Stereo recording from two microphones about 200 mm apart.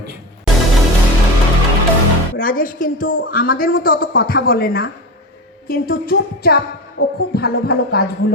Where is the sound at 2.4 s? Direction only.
45° left (ahead or behind).